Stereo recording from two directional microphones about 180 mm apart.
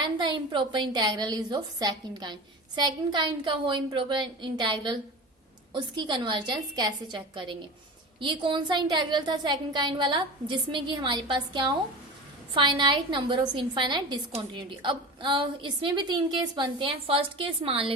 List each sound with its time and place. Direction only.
0.0 s a woman's voice: 25° right (ahead or behind)